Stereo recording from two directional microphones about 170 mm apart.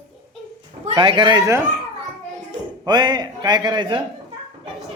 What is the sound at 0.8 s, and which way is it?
Speech, 30° right (ahead or behind).